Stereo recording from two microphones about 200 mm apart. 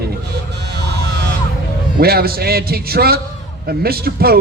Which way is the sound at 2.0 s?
50° right (ahead or behind).